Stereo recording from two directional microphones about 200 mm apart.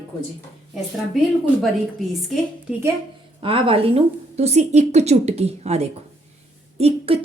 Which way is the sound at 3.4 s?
25° right (ahead or behind).